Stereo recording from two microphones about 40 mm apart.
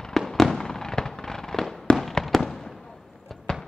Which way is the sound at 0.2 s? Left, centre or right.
Centre.